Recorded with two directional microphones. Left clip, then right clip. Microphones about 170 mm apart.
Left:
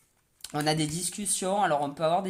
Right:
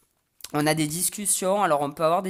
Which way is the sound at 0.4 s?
45° right (ahead or behind).